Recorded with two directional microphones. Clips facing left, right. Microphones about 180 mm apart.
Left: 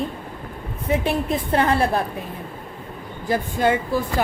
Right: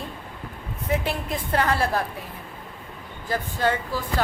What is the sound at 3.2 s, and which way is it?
Speech, 15° left (ahead or behind).